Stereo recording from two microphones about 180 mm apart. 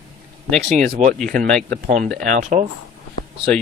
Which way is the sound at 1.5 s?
5° left (ahead or behind).